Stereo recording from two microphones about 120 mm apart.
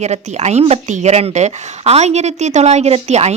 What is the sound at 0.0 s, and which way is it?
A woman's voice, 70° right (ahead or behind).